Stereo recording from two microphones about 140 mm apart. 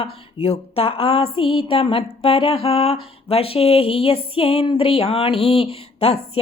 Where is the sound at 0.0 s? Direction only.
45° left (ahead or behind).